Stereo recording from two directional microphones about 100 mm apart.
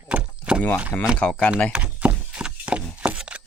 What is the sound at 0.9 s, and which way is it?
Speech, 15° left (ahead or behind).